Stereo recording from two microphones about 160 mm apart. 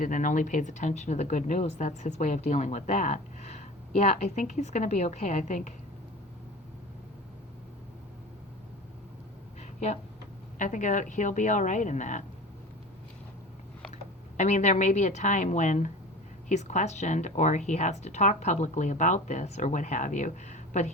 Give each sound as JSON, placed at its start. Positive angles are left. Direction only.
{"t": 0.0, "sound": "speech", "side_deg": 55}
{"t": 10.6, "sound": "speech", "side_deg": 50}
{"t": 13.9, "sound": "speech", "side_deg": 50}